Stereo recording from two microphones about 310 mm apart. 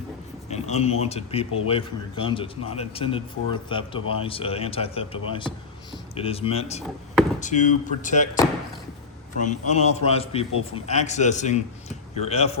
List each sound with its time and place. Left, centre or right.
0.5 s a man's voice: left
9.4 s a man's voice: left